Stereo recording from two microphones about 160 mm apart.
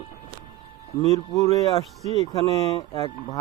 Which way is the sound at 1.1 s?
20° left (ahead or behind).